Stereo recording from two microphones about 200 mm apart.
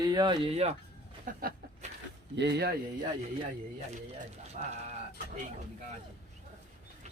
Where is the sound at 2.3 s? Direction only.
60° right (ahead or behind).